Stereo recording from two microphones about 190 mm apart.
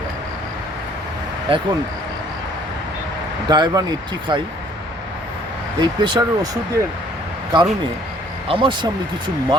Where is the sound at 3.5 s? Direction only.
20° right (ahead or behind).